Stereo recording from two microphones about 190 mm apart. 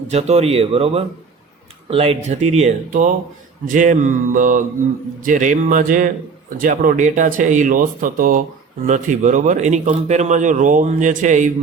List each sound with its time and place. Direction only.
0.1 s speech: 35° right (ahead or behind)